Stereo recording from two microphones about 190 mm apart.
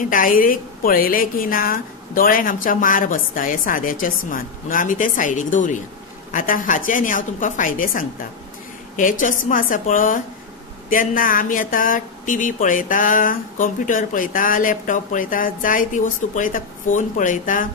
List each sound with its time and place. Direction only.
0.0 s speech: 45° left (ahead or behind)
9.5 s speech: 45° left (ahead or behind)